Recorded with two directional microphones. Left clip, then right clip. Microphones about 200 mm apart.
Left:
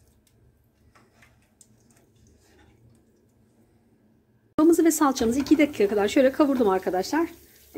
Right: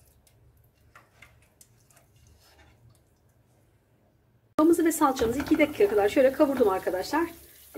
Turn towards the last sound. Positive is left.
turn(degrees=60)  # may be behind; listen again after turning